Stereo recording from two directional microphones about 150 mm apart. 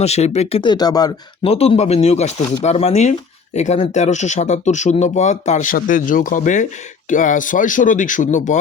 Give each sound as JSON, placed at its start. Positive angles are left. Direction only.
{"t": 0.0, "sound": "speech", "side_deg": 45}
{"t": 0.6, "sound": "speech", "side_deg": 30}
{"t": 1.5, "sound": "speech", "side_deg": 40}